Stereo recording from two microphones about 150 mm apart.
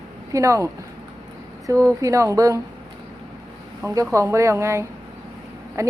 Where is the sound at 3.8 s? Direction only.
20° right (ahead or behind).